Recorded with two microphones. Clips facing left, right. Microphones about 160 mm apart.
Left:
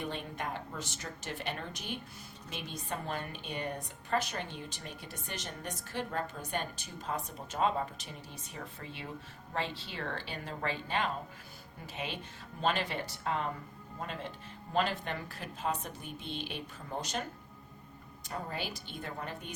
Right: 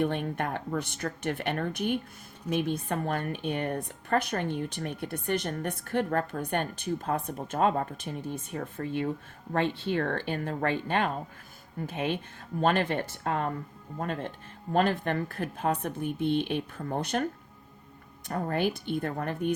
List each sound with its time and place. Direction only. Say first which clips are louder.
0.0 s a woman's voice: right 9 dB; 60° right (ahead or behind)
18.3 s a woman's voice: right 10 dB; 55° right (ahead or behind)